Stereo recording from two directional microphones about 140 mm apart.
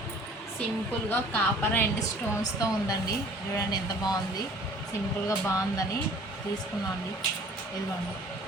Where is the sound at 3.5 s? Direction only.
30° left (ahead or behind).